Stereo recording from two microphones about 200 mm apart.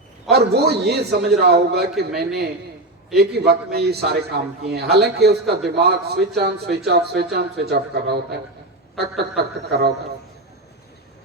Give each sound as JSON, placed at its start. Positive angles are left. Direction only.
{"t": 0.3, "sound": "a man's voice", "side_deg": -55}
{"t": 9.4, "sound": "a man's voice", "side_deg": -55}